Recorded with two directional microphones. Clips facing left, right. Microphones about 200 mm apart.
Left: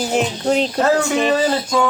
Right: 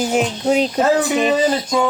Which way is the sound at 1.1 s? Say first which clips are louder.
Even; 5° right (ahead or behind).